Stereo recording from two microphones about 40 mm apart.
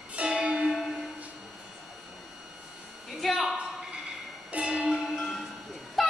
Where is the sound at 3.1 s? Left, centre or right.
Centre.